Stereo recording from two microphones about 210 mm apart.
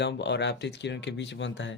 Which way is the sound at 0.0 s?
55° left (ahead or behind).